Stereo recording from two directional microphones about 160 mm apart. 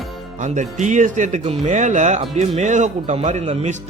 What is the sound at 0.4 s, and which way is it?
Speech, 50° right (ahead or behind).